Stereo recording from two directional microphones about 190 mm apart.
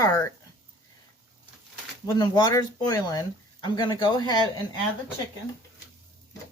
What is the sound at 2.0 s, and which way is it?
Speech, 20° left (ahead or behind).